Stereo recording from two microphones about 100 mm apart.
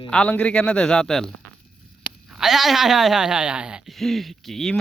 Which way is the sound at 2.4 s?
5° right (ahead or behind).